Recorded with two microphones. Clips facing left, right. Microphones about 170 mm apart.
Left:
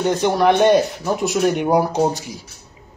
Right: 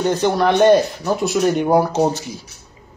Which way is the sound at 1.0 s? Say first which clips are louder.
Right 1 dB; 15° left (ahead or behind).